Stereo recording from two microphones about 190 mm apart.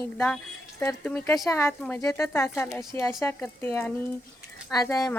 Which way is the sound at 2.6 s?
5° left (ahead or behind).